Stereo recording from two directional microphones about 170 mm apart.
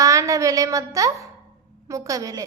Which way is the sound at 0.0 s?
20° right (ahead or behind).